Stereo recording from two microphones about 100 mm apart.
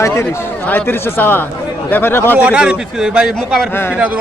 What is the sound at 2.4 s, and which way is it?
A man's voice, 10° right (ahead or behind).